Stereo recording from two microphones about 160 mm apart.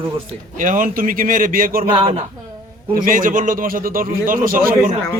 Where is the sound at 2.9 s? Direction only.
60° right (ahead or behind).